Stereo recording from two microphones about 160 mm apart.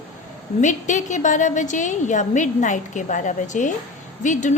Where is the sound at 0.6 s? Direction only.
50° left (ahead or behind).